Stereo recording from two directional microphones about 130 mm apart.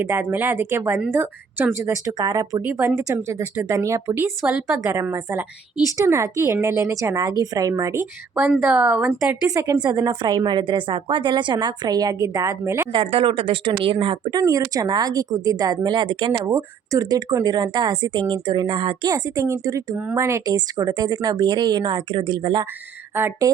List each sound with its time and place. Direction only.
0.0 s a woman's voice: 15° right (ahead or behind)
8.4 s a woman's voice: 10° right (ahead or behind)
9.5 s a woman's voice: 25° right (ahead or behind)
12.9 s a woman's voice: 45° right (ahead or behind)
16.5 s a woman's voice: 25° right (ahead or behind)
19.1 s a woman's voice: 25° right (ahead or behind)
23.1 s a woman's voice: 15° right (ahead or behind)